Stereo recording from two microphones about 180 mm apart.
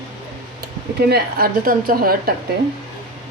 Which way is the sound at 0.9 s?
60° right (ahead or behind).